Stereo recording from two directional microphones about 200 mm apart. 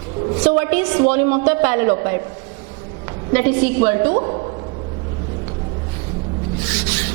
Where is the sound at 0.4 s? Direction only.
15° right (ahead or behind).